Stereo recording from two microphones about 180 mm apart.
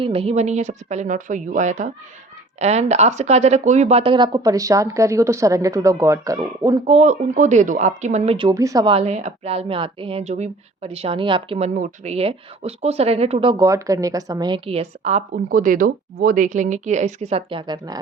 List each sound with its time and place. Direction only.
0.0 s a woman's voice: 30° right (ahead or behind)
6.8 s a woman's voice: 40° right (ahead or behind)
8.4 s speech: 20° right (ahead or behind)
8.9 s a woman's voice: 35° right (ahead or behind)